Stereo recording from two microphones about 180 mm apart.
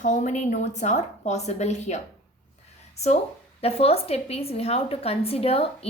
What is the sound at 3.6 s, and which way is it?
A woman's voice, 35° left (ahead or behind).